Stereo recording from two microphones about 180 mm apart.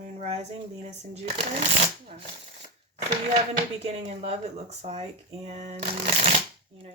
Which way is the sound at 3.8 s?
35° right (ahead or behind).